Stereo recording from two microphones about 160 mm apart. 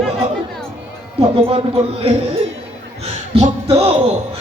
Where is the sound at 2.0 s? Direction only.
35° right (ahead or behind).